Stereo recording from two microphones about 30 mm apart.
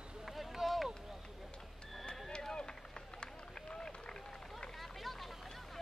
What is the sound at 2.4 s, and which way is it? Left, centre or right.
Run, left.